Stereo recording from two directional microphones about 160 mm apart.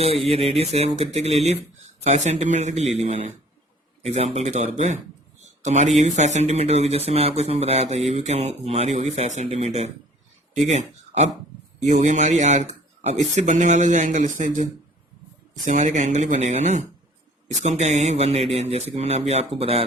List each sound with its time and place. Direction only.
0.0 s speech: 40° right (ahead or behind)
5.4 s a sound: 45° right (ahead or behind)
6.0 s speech: 45° right (ahead or behind)